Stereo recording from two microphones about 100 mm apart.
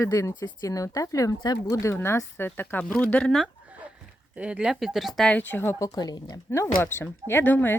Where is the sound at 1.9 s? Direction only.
25° left (ahead or behind).